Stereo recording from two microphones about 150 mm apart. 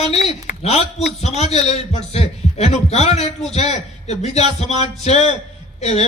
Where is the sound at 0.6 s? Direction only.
45° left (ahead or behind).